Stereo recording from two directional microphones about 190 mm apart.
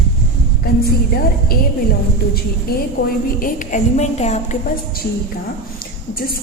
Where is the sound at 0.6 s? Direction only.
55° left (ahead or behind).